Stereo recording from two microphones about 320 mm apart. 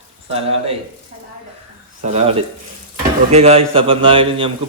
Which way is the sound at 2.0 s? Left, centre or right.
Centre.